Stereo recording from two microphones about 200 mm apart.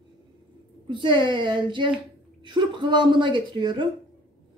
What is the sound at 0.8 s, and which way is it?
A woman's voice, 25° right (ahead or behind).